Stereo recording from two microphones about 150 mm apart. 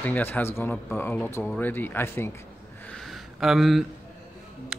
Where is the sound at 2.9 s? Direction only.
Centre (ahead or behind).